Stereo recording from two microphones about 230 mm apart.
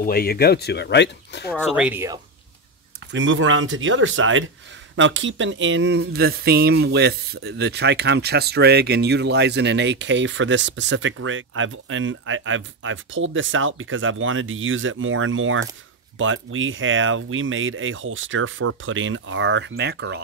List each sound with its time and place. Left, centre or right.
0.0 s speech: left
1.8 s speech: centre
3.1 s speech: right